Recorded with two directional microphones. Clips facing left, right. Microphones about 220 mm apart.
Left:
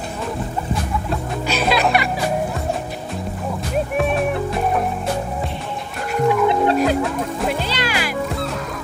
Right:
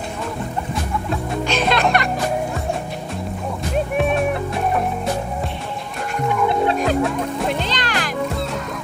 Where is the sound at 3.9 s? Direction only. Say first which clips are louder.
Even; centre (ahead or behind).